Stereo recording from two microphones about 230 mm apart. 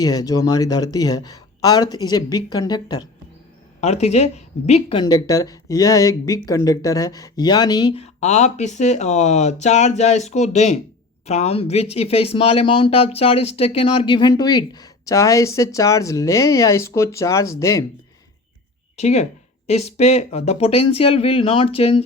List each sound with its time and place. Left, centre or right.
0.0 s speech: centre
3.8 s speech: left; by 17.8 s centre
18.9 s speech: left